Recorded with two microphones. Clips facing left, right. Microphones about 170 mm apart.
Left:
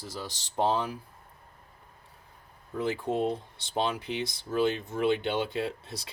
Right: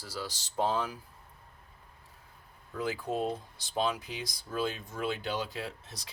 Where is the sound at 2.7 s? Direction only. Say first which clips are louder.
Left 4 dB; 25° left (ahead or behind).